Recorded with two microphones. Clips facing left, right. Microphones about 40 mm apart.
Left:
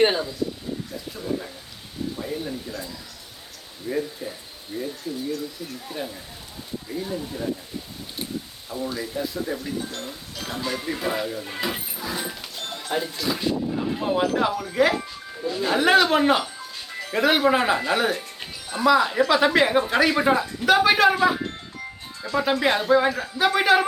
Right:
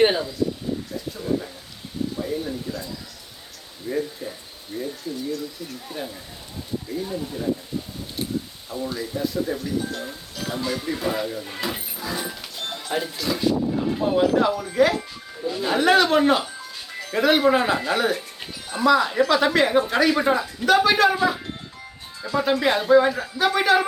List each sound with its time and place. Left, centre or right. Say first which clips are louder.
1.1 s a sound: right 3 dB; centre
3.8 s speech: right 1 dB; centre
8.7 s speech: even; centre
10.8 s speech: right 1 dB; centre
12.5 s music: right 4 dB; centre
12.9 s speech: even; centre
14.0 s a woman's voice: right 3 dB; centre